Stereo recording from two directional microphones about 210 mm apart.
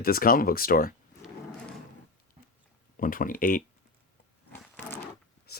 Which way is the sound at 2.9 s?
40° left (ahead or behind).